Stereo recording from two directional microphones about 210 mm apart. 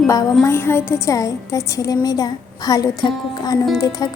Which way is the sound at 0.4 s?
10° left (ahead or behind).